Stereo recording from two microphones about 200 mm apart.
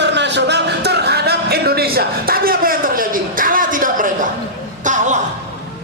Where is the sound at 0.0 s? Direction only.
60° right (ahead or behind); by 5.2 s 40° right (ahead or behind).